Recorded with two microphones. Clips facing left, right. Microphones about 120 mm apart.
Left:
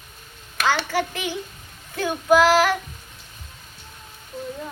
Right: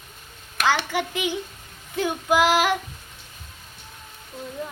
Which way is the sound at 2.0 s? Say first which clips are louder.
Left 3 dB; 15° right (ahead or behind).